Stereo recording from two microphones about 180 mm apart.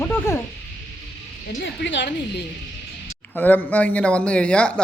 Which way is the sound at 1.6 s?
80° left.